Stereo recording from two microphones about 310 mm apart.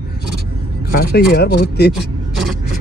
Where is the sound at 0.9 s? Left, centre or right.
Left.